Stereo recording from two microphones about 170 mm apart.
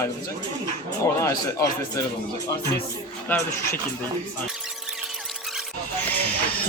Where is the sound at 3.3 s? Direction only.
15° left (ahead or behind).